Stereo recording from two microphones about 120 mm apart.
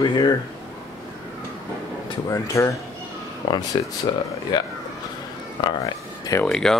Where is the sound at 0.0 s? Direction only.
35° left (ahead or behind).